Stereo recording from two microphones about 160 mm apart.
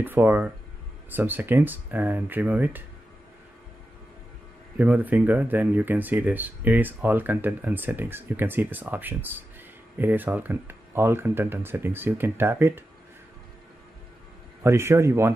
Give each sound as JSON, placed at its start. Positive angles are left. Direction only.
{"t": 0.0, "sound": "speech", "side_deg": -10}
{"t": 4.7, "sound": "speech", "side_deg": -10}
{"t": 14.6, "sound": "speech", "side_deg": -15}